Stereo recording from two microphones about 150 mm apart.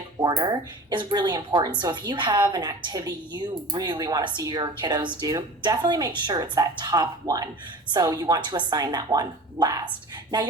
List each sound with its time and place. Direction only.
0.2 s speech: 30° right (ahead or behind)